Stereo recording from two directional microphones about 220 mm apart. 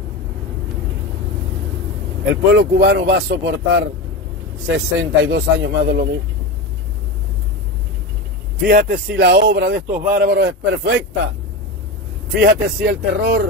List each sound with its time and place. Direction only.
2.5 s speech: 55° right (ahead or behind)
8.6 s speech: 45° right (ahead or behind)
12.4 s speech: 50° right (ahead or behind)